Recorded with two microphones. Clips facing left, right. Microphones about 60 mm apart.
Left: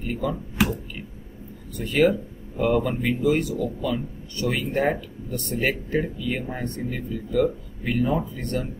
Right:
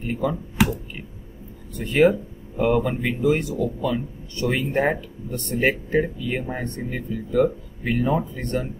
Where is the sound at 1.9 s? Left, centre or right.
Right.